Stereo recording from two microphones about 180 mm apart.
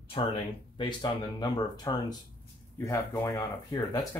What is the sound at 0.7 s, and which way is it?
Speech, 25° left (ahead or behind).